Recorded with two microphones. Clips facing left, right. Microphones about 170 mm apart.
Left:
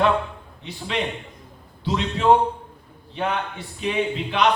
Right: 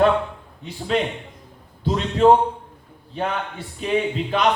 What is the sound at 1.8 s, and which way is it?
Speech, 45° right (ahead or behind).